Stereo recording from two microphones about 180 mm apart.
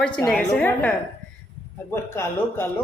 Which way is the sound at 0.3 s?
5° left (ahead or behind).